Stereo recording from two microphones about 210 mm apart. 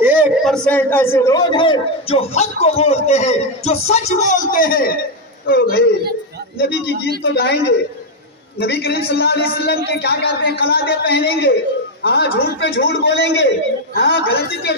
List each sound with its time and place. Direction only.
0.0 s a man's voice: 10° right (ahead or behind); by 14.7 s 55° left (ahead or behind)